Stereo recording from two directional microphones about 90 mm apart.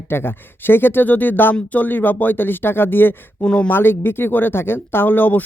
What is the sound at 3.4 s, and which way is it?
Speech, 10° left (ahead or behind).